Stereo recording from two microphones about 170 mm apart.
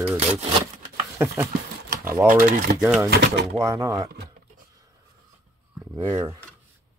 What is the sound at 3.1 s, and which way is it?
Speech, 85° right.